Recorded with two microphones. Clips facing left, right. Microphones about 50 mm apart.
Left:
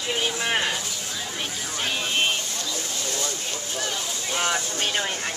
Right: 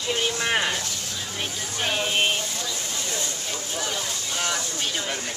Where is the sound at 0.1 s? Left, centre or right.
Centre.